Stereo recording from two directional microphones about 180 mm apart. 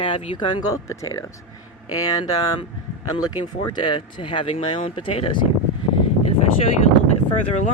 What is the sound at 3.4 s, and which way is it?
Speech, 25° left (ahead or behind).